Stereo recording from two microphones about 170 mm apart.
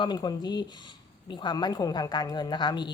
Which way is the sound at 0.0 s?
25° left (ahead or behind).